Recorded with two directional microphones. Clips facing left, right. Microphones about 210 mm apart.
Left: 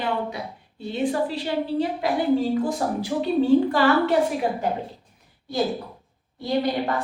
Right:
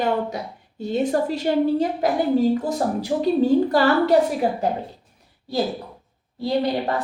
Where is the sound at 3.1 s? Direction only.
35° right (ahead or behind).